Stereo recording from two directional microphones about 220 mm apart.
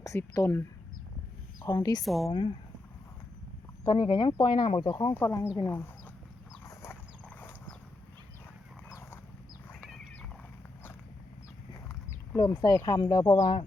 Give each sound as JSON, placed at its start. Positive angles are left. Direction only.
{"t": 0.0, "sound": "speech", "side_deg": 15}
{"t": 1.6, "sound": "speech", "side_deg": 15}
{"t": 2.0, "sound": "speech", "side_deg": 0}
{"t": 3.8, "sound": "speech", "side_deg": 20}
{"t": 5.1, "sound": "speech", "side_deg": 10}
{"t": 8.9, "sound": "dog", "side_deg": 15}
{"t": 12.3, "sound": "speech", "side_deg": 15}